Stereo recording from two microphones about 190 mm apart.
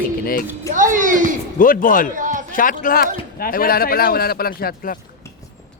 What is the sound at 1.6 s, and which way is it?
Speech, 45° left (ahead or behind).